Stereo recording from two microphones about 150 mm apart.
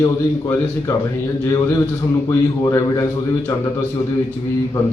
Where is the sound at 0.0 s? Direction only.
20° left (ahead or behind).